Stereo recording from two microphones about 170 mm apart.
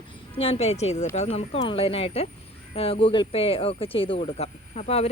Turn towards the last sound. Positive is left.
turn(degrees=40)  # may be behind; listen again after turning